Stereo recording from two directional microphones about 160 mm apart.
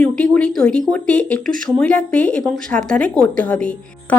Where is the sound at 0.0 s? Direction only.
5° left (ahead or behind).